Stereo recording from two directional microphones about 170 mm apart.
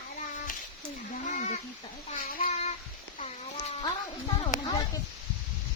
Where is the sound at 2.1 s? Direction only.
55° left (ahead or behind).